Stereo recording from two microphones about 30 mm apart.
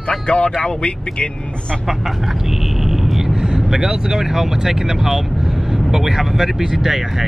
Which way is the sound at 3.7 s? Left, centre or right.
Centre.